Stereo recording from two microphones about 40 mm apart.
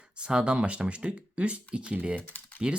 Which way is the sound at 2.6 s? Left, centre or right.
Right.